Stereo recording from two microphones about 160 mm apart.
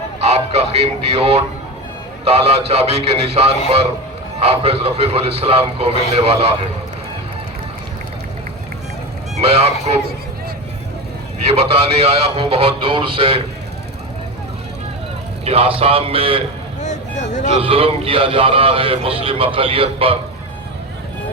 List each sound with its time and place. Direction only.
0.2 s a man's voice: 40° right (ahead or behind)
9.3 s honk: 40° right (ahead or behind)
11.4 s a man's voice: 40° right (ahead or behind)
15.4 s a man's voice: 35° right (ahead or behind)
16.8 s a sound: 45° left (ahead or behind)
17.6 s a man's voice: 35° right (ahead or behind)